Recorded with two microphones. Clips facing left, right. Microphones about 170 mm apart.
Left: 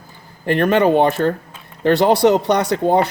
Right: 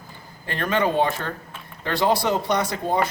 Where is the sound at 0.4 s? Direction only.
60° left (ahead or behind).